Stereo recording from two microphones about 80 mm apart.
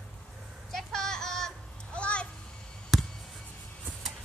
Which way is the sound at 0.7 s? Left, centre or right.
Centre.